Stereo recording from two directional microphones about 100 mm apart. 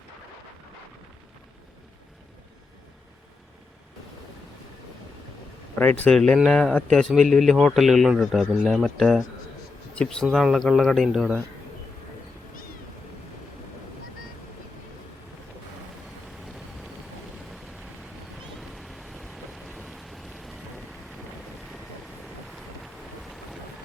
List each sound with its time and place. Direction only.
5.8 s speech: 15° left (ahead or behind)
6.1 s speech: 5° left (ahead or behind)
18.7 s vehicle: centre (ahead or behind)